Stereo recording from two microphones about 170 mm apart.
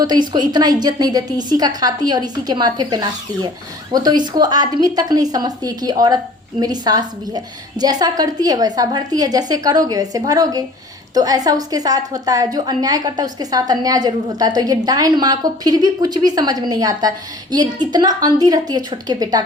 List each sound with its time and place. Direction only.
0.0 s a woman's voice: 25° right (ahead or behind)